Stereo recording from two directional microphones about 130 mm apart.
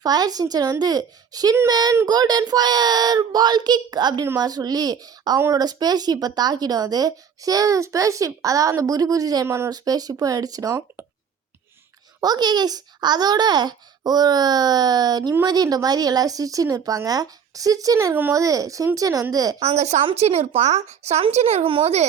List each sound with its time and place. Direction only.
0.0 s a child's voice: 30° right (ahead or behind)
12.2 s a child's voice: 30° right (ahead or behind)
19.5 s speech: 55° right (ahead or behind)